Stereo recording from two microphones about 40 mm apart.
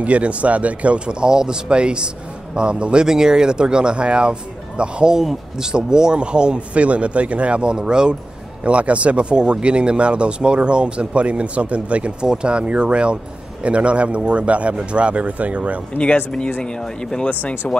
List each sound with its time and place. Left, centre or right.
0.0 s speech: right
5.1 s speech: centre; by 15.8 s right
16.6 s speech: centre
17.3 s speech: left